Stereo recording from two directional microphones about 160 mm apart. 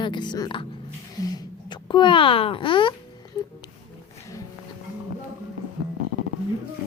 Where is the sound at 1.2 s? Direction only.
25° left (ahead or behind).